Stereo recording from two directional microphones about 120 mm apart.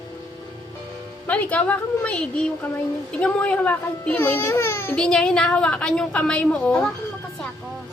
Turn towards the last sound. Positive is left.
turn(degrees=10)  # may be behind; listen again after turning